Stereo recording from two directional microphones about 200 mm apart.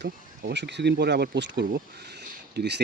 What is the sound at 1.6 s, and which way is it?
Speech, 50° right (ahead or behind).